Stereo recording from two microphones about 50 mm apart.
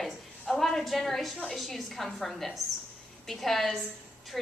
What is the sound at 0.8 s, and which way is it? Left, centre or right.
A woman's voice, centre.